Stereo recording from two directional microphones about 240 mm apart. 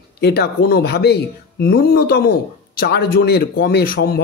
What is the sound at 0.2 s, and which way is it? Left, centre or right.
A man's voice, left.